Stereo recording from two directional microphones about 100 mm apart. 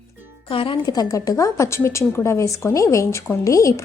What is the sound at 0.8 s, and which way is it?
A woman's voice, 40° left (ahead or behind).